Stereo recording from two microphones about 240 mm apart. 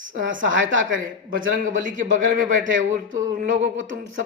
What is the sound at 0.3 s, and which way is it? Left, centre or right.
Speech, right.